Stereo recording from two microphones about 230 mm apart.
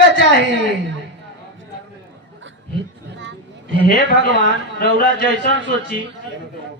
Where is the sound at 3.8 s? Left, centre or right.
Left.